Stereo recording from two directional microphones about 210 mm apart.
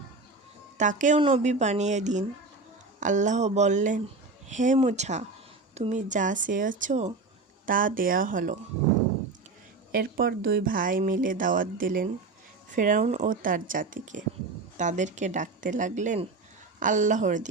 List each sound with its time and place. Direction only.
0.8 s speech: 35° right (ahead or behind)
9.9 s speech: 45° right (ahead or behind)